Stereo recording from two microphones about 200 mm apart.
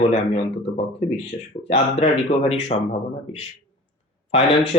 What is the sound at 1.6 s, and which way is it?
Speech, 30° left (ahead or behind).